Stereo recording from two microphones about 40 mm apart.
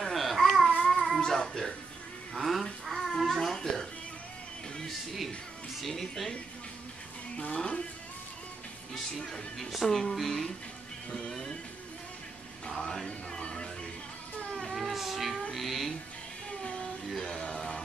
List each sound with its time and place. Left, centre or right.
0.1 s babbling: centre
0.8 s child singing: centre
2.3 s speech: centre
5.8 s speech: centre
7.3 s speech: left
9.2 s speech: centre
12.6 s speech: centre
13.4 s music: left
14.8 s a sound: centre
15.5 s music: centre
16.6 s a sound: left
17.2 s music: left